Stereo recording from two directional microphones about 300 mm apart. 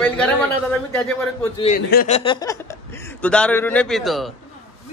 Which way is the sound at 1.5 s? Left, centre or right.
Left.